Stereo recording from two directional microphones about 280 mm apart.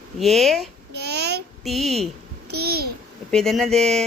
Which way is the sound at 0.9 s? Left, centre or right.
Right.